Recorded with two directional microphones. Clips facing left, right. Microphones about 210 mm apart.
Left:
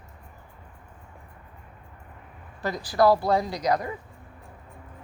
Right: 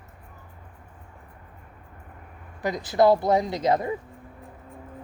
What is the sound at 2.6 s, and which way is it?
Speech, 20° right (ahead or behind).